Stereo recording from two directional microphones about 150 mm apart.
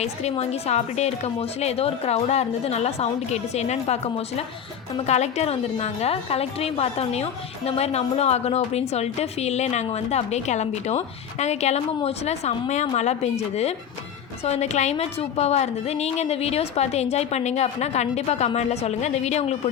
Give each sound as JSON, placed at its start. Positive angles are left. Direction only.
{"t": 0.0, "sound": "a woman's voice", "side_deg": 45}